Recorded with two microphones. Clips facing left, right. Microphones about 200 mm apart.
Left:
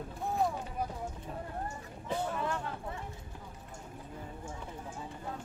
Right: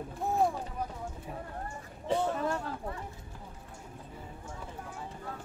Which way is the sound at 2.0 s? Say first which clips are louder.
Right 4 dB; 40° right (ahead or behind).